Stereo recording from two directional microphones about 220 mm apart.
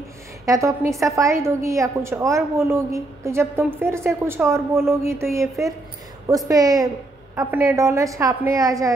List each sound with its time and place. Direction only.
0.5 s a woman's voice: 15° right (ahead or behind)